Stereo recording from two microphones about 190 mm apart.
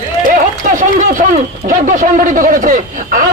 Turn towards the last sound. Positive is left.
turn(degrees=-45)  # may be behind; listen again after turning